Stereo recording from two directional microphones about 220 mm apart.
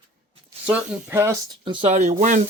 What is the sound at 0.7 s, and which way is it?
Speech, 5° right (ahead or behind).